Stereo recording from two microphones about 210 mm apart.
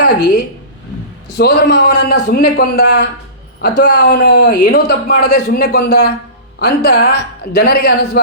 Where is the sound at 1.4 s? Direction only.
50° left (ahead or behind).